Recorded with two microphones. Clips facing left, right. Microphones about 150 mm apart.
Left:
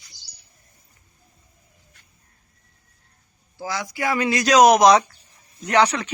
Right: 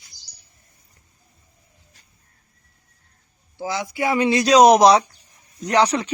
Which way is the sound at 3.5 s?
20° right (ahead or behind).